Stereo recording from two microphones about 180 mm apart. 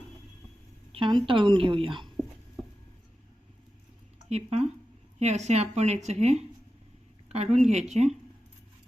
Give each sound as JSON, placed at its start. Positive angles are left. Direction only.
{"t": 0.9, "sound": "speech", "side_deg": -30}
{"t": 4.3, "sound": "a woman's voice", "side_deg": -35}